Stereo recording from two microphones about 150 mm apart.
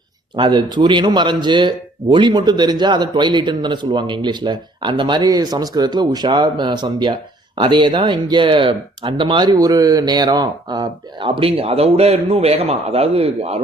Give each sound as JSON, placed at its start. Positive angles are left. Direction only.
{"t": 0.3, "sound": "speech", "side_deg": -30}